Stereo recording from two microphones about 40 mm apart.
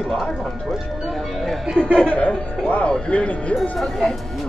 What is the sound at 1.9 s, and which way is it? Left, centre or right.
Speech, left.